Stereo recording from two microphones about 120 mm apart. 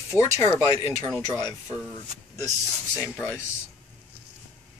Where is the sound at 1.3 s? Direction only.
35° left (ahead or behind).